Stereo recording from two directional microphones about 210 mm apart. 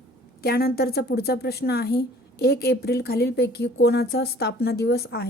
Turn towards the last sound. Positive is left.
turn(degrees=50)  # may be behind; listen again after turning